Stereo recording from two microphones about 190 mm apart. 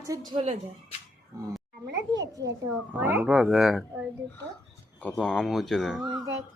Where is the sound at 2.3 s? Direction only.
20° right (ahead or behind); by 4.1 s centre (ahead or behind).